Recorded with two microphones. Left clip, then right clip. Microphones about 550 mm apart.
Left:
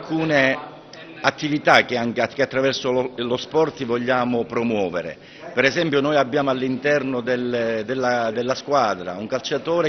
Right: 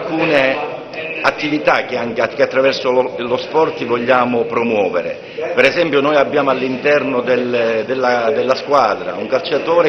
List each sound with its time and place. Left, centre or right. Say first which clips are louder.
0.3 s a man's voice: right 4 dB; left